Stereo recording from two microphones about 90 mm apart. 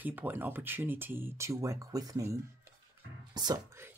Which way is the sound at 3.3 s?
50° right (ahead or behind).